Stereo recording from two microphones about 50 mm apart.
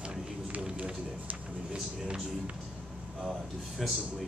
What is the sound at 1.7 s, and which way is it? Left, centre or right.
Speech, centre.